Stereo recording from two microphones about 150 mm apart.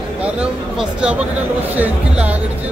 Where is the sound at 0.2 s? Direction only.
5° right (ahead or behind).